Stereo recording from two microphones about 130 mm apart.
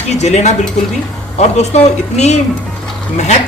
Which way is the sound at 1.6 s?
60° left (ahead or behind).